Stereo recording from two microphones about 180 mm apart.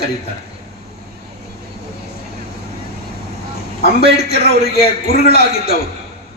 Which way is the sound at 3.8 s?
60° left (ahead or behind).